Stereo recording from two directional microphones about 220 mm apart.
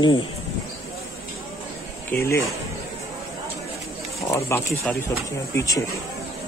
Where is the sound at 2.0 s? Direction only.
10° left (ahead or behind).